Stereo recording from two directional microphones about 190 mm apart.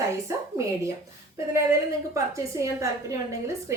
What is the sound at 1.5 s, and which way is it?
A woman's voice, 15° right (ahead or behind).